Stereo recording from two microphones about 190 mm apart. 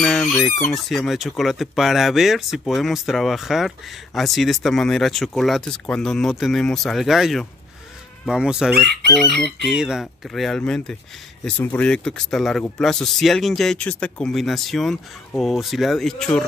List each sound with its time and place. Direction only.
0.0 s fowl: centre (ahead or behind)